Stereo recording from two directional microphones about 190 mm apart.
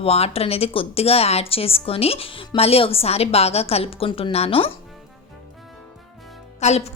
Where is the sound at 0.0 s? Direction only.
30° left (ahead or behind).